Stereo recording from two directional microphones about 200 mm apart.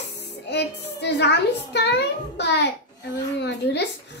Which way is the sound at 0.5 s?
55° left (ahead or behind).